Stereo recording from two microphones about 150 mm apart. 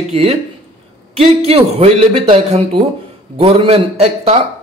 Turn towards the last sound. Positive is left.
turn(degrees=-40)  # may be behind; listen again after turning